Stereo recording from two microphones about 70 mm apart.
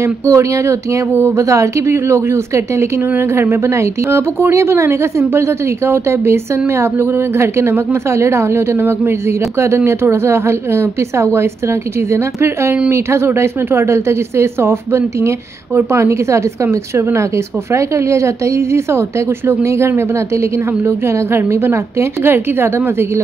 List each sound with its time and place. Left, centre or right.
0.0 s speech: right
1.1 s speech: right
1.4 s speech: right